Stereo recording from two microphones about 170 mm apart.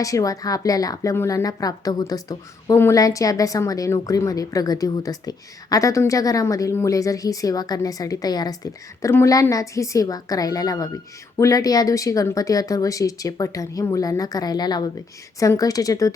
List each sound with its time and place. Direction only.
0.0 s a woman's voice: 20° left (ahead or behind)